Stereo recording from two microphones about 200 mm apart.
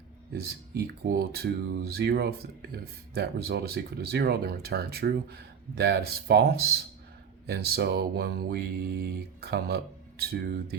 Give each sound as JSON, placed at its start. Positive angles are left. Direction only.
{"t": 0.3, "sound": "speech", "side_deg": -50}